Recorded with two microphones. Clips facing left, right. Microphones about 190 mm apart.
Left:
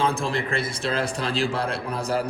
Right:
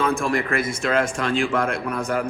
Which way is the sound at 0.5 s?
30° left (ahead or behind).